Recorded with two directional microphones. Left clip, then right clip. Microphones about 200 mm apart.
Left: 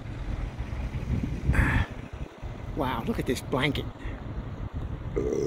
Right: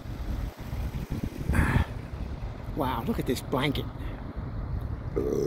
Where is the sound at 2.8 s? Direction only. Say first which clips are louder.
Even; centre (ahead or behind).